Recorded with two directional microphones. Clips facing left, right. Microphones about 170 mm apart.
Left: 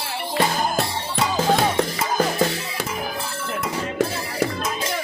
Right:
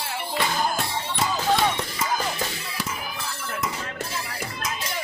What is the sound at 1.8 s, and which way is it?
Music, 55° left (ahead or behind).